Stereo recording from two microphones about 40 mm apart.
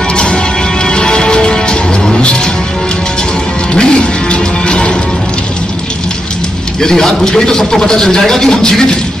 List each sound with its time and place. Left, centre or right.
0.1 s music: left
3.7 s music: left
6.8 s a man's voice: centre